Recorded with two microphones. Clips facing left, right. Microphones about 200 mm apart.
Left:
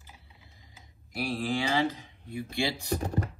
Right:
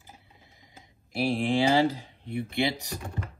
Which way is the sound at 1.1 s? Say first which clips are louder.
Right 5 dB; 30° right (ahead or behind).